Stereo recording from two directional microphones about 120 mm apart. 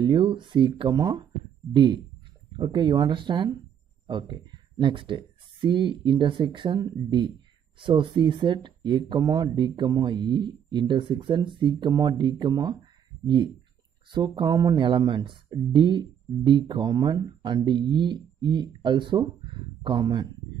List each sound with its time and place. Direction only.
0.0 s speech: 40° right (ahead or behind)